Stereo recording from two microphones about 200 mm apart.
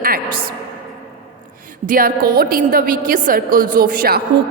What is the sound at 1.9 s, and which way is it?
A woman's voice, 45° right (ahead or behind).